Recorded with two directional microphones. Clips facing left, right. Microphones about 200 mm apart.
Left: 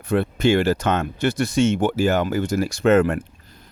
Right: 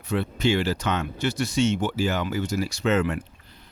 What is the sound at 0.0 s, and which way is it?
Speech, 55° left (ahead or behind).